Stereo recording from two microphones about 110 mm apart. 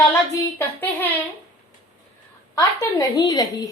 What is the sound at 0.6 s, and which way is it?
Speech, 15° left (ahead or behind).